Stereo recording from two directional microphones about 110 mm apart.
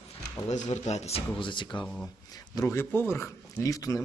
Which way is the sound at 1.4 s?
45° left (ahead or behind).